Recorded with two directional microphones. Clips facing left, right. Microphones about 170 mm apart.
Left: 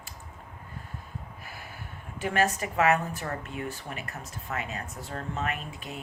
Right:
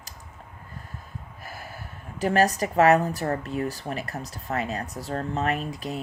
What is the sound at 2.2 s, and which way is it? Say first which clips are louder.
Speech: right 5 dB; 40° right (ahead or behind).